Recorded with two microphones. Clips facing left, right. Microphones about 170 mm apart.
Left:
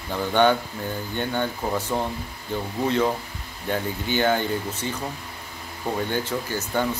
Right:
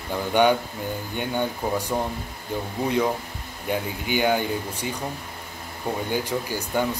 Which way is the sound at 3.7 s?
10° right (ahead or behind).